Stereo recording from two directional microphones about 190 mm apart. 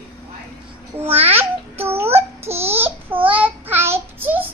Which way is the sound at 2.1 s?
35° right (ahead or behind).